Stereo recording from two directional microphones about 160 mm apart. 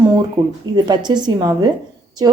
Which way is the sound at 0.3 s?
30° right (ahead or behind).